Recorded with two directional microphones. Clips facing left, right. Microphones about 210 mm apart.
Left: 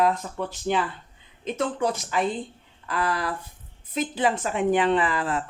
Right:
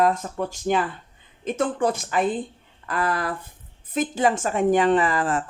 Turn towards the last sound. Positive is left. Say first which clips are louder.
# right 3 dB
turn(degrees=-45)  # may be behind; listen again after turning